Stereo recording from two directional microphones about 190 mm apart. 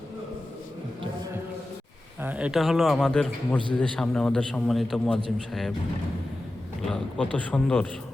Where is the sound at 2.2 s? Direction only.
10° right (ahead or behind).